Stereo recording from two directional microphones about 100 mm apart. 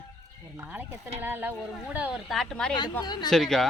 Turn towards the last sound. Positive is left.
turn(degrees=5)  # may be behind; listen again after turning